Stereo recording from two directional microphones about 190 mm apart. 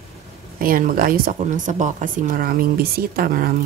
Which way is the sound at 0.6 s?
50° right (ahead or behind).